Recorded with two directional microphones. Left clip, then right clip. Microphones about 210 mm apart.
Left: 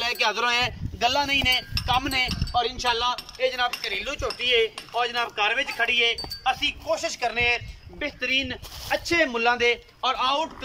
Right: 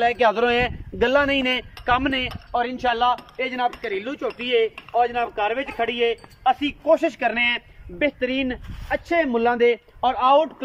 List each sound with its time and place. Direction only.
0.0 s speech: 40° right (ahead or behind)